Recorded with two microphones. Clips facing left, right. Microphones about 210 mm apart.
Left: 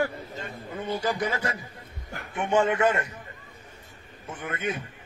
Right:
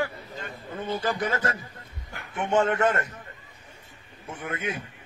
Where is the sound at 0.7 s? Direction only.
10° left (ahead or behind).